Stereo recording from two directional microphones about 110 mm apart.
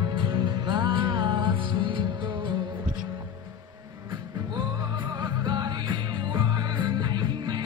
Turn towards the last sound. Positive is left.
turn(degrees=-40)  # may be behind; listen again after turning